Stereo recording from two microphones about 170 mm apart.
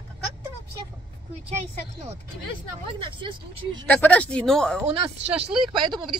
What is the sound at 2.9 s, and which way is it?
Speech, 30° right (ahead or behind).